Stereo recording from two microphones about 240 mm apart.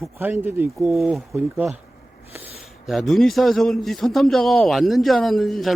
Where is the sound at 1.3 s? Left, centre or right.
Centre.